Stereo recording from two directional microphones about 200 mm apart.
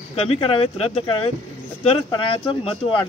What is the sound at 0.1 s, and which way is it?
Speech, 30° left (ahead or behind).